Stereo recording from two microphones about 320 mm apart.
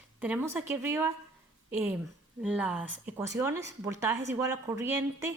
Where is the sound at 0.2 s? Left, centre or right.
Centre.